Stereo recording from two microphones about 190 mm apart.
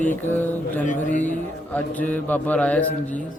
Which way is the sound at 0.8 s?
40° left (ahead or behind).